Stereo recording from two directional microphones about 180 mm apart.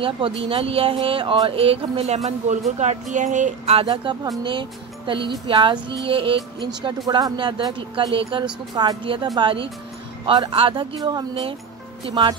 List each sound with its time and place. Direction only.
0.5 s speech: 30° right (ahead or behind)
3.8 s speech: 25° right (ahead or behind)